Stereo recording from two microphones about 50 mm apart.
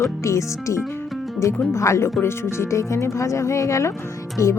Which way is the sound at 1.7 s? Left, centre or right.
Left.